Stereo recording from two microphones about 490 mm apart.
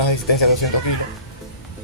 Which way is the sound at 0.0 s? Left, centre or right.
Left.